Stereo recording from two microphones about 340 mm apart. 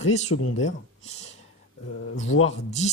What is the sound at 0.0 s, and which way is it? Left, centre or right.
Speech, centre.